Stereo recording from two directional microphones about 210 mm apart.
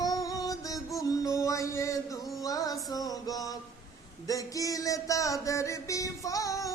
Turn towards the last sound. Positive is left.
turn(degrees=15)  # may be behind; listen again after turning